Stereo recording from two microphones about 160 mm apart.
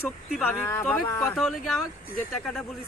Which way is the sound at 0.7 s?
15° left (ahead or behind).